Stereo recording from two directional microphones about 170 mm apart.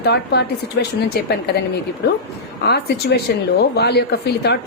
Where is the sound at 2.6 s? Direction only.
75° left (ahead or behind).